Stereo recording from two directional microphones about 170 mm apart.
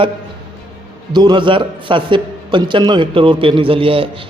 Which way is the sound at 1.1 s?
25° right (ahead or behind).